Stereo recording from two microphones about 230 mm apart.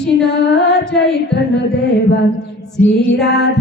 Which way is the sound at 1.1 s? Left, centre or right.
Left.